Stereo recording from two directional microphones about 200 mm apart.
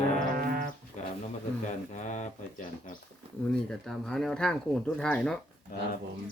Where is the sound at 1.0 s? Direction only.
35° left (ahead or behind).